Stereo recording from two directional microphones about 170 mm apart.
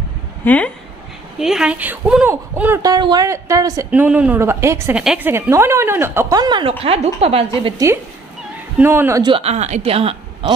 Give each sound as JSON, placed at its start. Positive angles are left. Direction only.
{"t": 1.4, "sound": "speech", "side_deg": -5}
{"t": 2.8, "sound": "speech", "side_deg": -25}
{"t": 6.8, "sound": "speech", "side_deg": -35}
{"t": 8.7, "sound": "speech", "side_deg": -15}
{"t": 9.2, "sound": "speech", "side_deg": -35}